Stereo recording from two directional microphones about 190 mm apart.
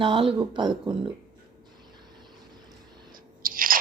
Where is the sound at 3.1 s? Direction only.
45° right (ahead or behind).